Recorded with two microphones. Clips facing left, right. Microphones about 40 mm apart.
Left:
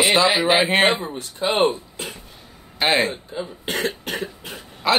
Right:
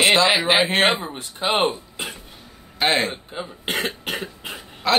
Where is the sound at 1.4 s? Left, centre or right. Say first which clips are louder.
Even; right.